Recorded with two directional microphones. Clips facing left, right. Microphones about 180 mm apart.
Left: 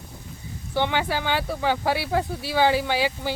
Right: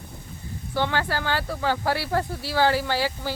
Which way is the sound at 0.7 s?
20° left (ahead or behind).